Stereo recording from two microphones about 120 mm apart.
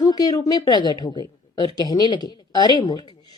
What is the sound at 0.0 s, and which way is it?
A woman's voice, 35° left (ahead or behind).